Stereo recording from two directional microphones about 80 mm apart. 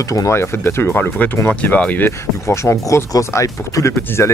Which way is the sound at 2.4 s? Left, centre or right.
Left.